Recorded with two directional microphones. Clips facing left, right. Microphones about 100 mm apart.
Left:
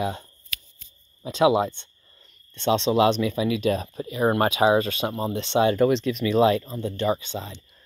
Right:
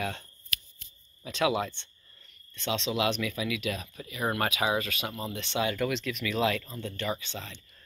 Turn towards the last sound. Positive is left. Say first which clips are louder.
# left 8 dB
turn(degrees=25)  # may be behind; listen again after turning